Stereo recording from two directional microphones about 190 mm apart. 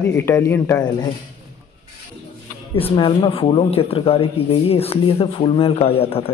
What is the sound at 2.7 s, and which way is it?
Speech, 30° left (ahead or behind).